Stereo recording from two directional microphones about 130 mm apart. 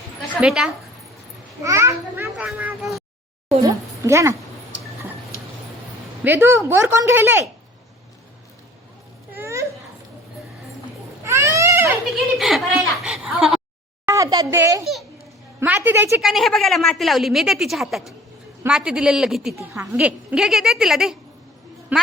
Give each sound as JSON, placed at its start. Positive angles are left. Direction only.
{"t": 0.4, "sound": "a woman's voice", "side_deg": -5}
{"t": 1.6, "sound": "a child's voice", "side_deg": -25}
{"t": 2.3, "sound": "speech", "side_deg": -5}
{"t": 3.6, "sound": "a woman's voice", "side_deg": -25}
{"t": 6.2, "sound": "speech", "side_deg": -15}
{"t": 9.3, "sound": "a sound", "side_deg": -20}
{"t": 11.2, "sound": "baby cry", "side_deg": -20}
{"t": 12.4, "sound": "a woman's voice", "side_deg": 0}
{"t": 14.0, "sound": "a child's voice", "side_deg": -20}
{"t": 15.6, "sound": "speech", "side_deg": -15}
{"t": 16.2, "sound": "a woman's voice", "side_deg": 0}
{"t": 19.5, "sound": "a child's voice", "side_deg": -20}
{"t": 20.0, "sound": "a woman's voice", "side_deg": -10}